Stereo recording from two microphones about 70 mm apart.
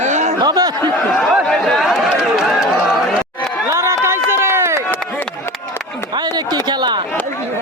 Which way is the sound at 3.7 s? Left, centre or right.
Right.